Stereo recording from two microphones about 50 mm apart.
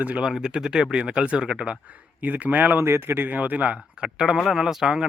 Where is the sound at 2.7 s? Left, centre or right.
Right.